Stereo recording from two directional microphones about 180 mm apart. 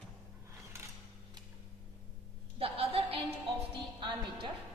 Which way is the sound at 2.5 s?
35° right (ahead or behind).